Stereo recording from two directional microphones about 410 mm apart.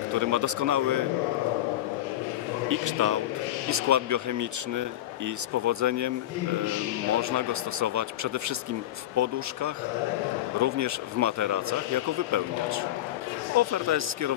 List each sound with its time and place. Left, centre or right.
0.1 s a man's voice: right
2.7 s a man's voice: right
7.2 s a man's voice: right